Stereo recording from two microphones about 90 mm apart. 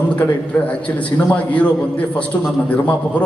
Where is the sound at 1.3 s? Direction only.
15° left (ahead or behind).